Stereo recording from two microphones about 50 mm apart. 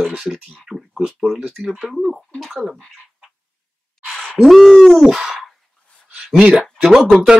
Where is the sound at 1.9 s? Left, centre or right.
Centre.